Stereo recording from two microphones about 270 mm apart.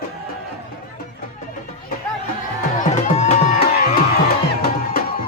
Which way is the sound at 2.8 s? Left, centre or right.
Left.